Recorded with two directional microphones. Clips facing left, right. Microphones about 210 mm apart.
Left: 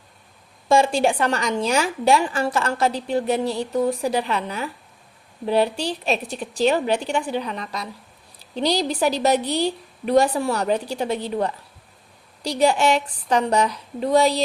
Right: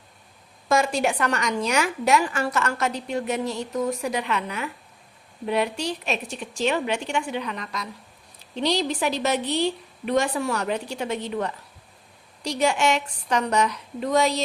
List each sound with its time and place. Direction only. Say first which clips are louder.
0.7 s a woman's voice: left 4 dB; 30° left (ahead or behind)